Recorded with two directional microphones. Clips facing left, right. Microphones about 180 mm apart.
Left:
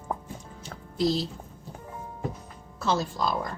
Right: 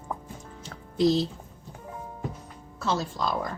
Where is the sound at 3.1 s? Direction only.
5° left (ahead or behind).